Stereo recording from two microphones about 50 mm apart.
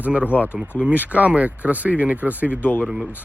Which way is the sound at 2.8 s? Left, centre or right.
Centre.